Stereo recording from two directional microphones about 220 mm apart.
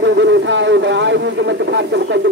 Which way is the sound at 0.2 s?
55° right (ahead or behind).